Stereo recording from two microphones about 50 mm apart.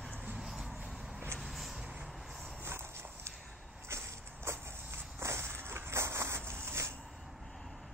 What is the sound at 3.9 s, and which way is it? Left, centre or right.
Vehicle, right.